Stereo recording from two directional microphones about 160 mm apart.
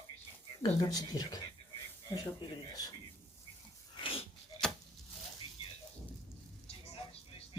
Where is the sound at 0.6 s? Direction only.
25° left (ahead or behind).